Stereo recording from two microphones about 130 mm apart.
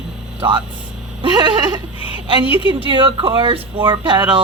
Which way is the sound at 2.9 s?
40° right (ahead or behind).